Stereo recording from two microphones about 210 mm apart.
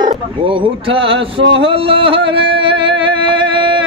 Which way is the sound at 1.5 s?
25° right (ahead or behind).